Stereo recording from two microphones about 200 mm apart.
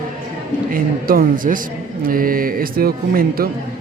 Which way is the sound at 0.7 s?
45° right (ahead or behind).